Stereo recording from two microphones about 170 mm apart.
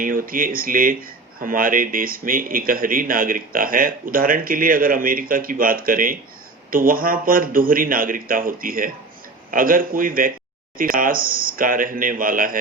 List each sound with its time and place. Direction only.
0.0 s speech: 55° right (ahead or behind)